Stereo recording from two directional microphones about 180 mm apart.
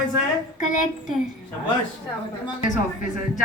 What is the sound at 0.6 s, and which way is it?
Speech, 45° left (ahead or behind).